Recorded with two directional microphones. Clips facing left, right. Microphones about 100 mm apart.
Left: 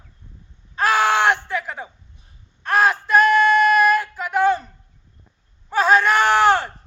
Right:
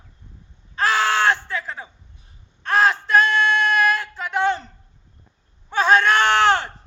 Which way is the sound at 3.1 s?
10° left (ahead or behind).